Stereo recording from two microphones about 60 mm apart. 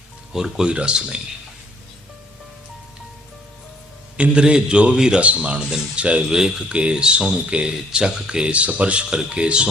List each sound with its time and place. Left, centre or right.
0.3 s speech: centre
4.2 s speech: centre